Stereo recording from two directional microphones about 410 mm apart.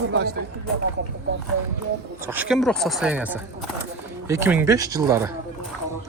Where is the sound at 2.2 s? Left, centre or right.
Centre.